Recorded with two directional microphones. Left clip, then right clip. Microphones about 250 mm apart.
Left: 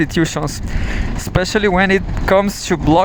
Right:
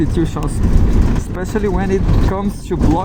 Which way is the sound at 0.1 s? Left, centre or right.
Left.